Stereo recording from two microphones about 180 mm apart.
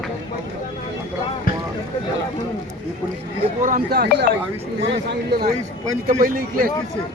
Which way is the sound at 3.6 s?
50° right (ahead or behind).